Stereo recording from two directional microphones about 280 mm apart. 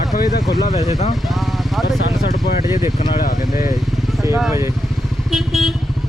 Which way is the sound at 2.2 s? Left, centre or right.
Left.